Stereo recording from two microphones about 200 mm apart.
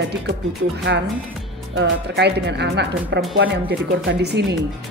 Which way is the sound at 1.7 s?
60° right (ahead or behind).